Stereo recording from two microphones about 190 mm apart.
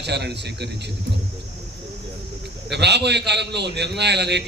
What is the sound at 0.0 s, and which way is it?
Speech, 60° right (ahead or behind).